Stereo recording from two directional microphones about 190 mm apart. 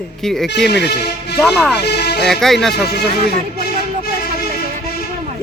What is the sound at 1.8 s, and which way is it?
Speech, 60° left (ahead or behind).